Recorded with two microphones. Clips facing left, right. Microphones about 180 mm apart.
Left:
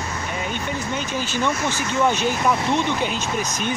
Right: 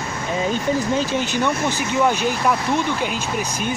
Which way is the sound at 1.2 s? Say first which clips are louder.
Right 2 dB; 15° right (ahead or behind).